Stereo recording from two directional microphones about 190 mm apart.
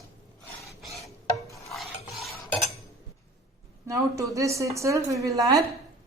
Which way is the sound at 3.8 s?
15° right (ahead or behind).